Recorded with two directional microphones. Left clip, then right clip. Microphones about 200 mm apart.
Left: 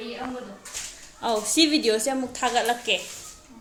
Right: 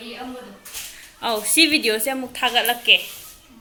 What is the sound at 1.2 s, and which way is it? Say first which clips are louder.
A woman's voice: right 4 dB; 5° left (ahead or behind).